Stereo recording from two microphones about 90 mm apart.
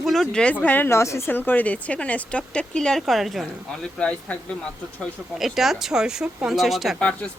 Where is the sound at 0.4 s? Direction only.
20° left (ahead or behind).